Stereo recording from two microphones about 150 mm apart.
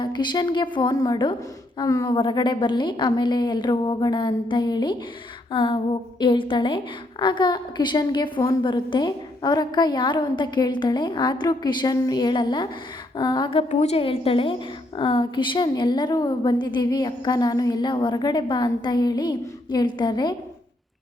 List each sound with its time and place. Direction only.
0.0 s a woman's voice: 30° left (ahead or behind)